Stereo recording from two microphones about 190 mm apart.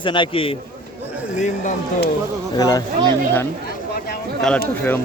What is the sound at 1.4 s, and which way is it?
Speech, 40° left (ahead or behind).